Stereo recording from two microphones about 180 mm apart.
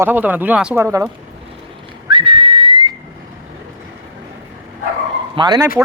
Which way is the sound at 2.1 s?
30° right (ahead or behind).